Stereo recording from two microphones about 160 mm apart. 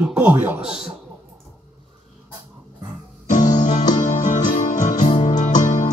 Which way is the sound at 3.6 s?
50° left (ahead or behind).